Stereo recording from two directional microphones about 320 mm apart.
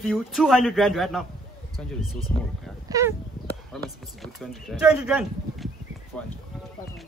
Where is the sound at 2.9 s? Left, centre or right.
Centre.